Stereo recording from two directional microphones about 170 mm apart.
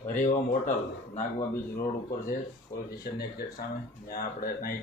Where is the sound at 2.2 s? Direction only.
65° left (ahead or behind).